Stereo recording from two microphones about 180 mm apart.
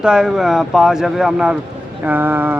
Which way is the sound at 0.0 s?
5° right (ahead or behind).